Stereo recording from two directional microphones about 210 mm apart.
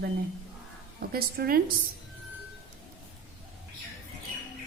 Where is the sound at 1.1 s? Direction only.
45° right (ahead or behind).